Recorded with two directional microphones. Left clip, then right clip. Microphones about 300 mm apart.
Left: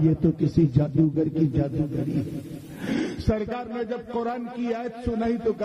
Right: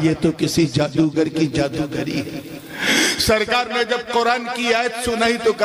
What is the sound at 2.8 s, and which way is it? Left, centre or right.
A man's voice, centre.